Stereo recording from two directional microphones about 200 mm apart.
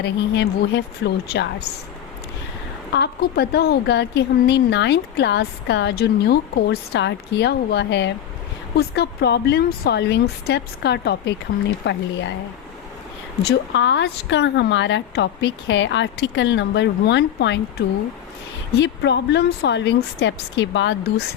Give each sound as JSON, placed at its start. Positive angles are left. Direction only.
{"t": 0.0, "sound": "speech", "side_deg": 60}
{"t": 2.9, "sound": "speech", "side_deg": 55}
{"t": 13.4, "sound": "speech", "side_deg": 60}
{"t": 18.8, "sound": "speech", "side_deg": 60}